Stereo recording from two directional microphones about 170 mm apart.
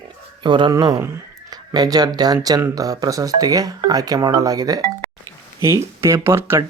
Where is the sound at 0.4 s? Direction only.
25° right (ahead or behind).